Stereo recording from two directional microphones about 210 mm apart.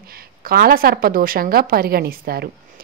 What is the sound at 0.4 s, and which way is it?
A woman's voice, 45° right (ahead or behind).